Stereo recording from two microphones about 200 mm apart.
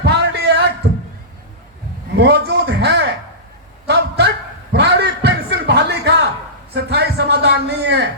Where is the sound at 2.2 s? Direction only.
55° right (ahead or behind).